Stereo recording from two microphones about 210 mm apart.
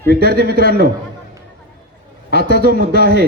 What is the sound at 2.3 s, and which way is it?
Speech, 50° right (ahead or behind).